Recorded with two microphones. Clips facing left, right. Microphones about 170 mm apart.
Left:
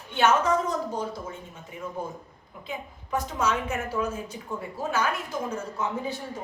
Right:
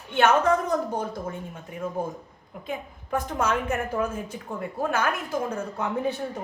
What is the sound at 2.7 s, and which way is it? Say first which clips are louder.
A woman's voice: right 2 dB; 55° right (ahead or behind).